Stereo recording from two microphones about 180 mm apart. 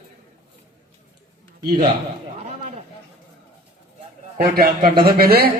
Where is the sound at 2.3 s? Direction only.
40° right (ahead or behind).